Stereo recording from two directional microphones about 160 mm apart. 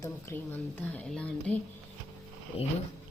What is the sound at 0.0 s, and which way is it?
A woman's voice, 15° left (ahead or behind).